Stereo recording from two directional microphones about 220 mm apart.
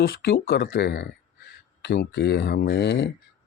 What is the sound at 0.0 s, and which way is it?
Speech, 45° left (ahead or behind).